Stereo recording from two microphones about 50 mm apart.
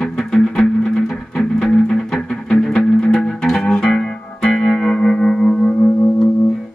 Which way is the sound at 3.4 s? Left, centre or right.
Centre.